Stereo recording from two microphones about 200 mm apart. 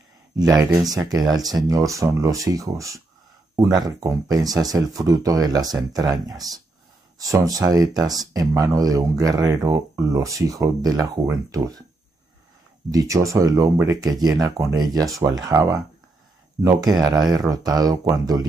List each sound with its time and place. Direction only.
0.4 s speech: 20° right (ahead or behind)
12.9 s speech: 15° right (ahead or behind)